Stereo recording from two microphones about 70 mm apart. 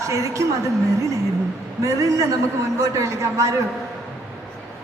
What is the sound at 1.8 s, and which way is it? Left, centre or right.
A woman's voice, right.